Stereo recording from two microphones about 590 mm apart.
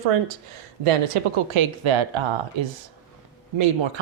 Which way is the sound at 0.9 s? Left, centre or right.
Right.